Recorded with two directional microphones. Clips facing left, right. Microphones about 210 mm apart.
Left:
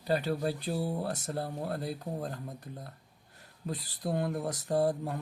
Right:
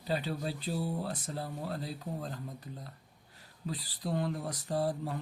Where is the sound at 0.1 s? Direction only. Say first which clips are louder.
Left 4 dB; 50° left (ahead or behind).